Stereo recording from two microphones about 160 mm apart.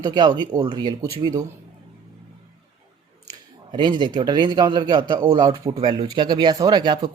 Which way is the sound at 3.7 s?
30° right (ahead or behind).